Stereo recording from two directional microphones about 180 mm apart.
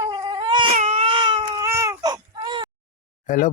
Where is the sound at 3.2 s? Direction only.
45° left (ahead or behind).